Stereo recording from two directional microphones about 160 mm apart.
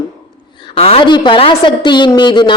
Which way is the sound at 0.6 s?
40° left (ahead or behind).